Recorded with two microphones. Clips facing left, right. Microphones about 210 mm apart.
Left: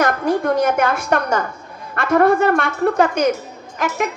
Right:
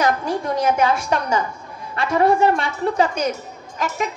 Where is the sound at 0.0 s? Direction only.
55° left (ahead or behind).